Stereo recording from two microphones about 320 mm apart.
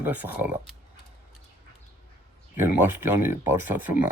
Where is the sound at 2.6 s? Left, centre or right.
Centre.